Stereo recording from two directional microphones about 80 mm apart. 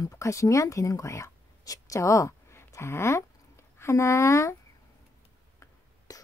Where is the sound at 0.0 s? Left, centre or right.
Left.